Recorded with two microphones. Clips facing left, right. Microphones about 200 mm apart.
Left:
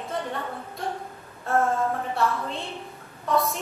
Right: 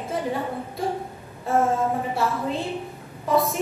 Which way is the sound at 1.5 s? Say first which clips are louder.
Right 2 dB; 15° right (ahead or behind).